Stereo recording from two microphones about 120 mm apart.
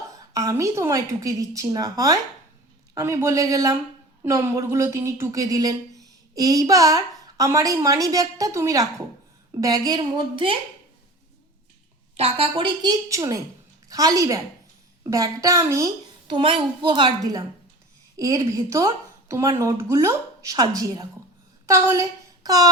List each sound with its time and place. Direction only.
0.3 s a woman's voice: 25° right (ahead or behind); by 10.6 s 45° right (ahead or behind)
12.1 s a woman's voice: 55° right (ahead or behind); by 15.9 s 25° right (ahead or behind)
16.2 s a woman's voice: 45° right (ahead or behind)